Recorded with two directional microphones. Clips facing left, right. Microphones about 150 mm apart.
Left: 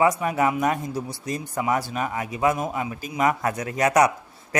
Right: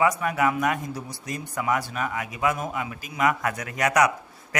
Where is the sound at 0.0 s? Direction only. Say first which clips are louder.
Left 2 dB; 30° left (ahead or behind).